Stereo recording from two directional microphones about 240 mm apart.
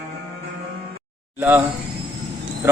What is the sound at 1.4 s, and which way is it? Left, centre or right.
Speech, centre.